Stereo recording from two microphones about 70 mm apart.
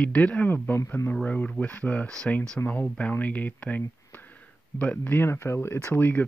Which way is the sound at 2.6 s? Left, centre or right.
Left.